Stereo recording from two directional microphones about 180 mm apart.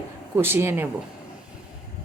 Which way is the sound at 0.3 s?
15° right (ahead or behind).